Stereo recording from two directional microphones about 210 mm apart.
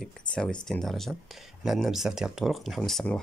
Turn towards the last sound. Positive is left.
turn(degrees=0)  # may be behind; listen again after turning